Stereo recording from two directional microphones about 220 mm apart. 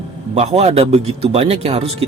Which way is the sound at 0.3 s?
30° right (ahead or behind).